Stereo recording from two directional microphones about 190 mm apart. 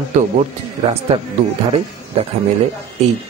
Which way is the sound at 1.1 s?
30° right (ahead or behind).